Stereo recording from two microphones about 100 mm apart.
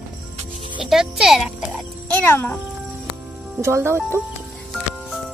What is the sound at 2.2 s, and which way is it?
Speech, 25° left (ahead or behind).